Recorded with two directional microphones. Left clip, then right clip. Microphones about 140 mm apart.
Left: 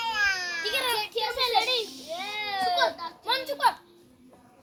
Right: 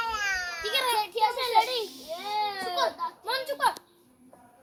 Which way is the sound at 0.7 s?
15° right (ahead or behind).